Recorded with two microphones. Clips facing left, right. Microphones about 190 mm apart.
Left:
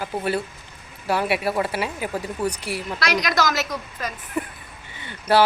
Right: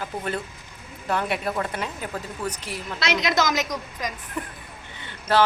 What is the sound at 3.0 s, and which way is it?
A woman's voice, 25° right (ahead or behind).